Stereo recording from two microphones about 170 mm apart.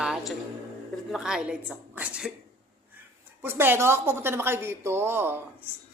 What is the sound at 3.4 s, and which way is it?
A woman's voice, 15° right (ahead or behind).